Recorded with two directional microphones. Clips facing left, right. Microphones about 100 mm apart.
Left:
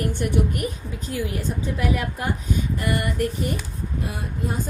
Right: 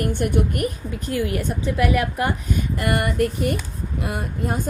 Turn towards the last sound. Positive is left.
turn(degrees=-55)  # may be behind; listen again after turning